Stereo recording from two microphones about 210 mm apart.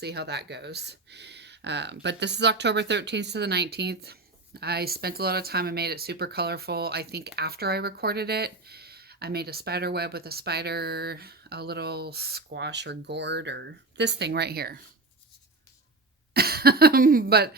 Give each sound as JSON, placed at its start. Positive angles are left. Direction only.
{"t": 0.0, "sound": "speech", "side_deg": -50}
{"t": 16.3, "sound": "speech", "side_deg": -50}